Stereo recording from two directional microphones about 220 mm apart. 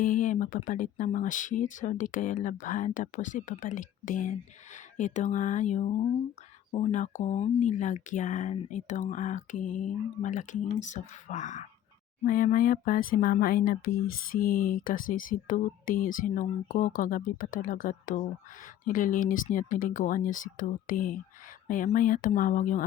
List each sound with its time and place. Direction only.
0.0 s speech: 35° left (ahead or behind)